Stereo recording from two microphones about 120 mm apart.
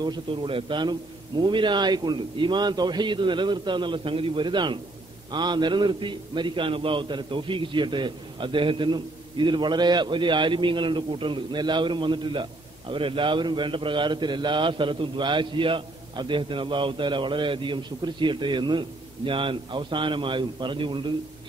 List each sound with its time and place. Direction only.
0.0 s a man's voice: 40° right (ahead or behind)